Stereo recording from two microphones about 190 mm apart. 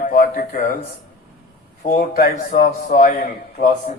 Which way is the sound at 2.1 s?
50° left (ahead or behind).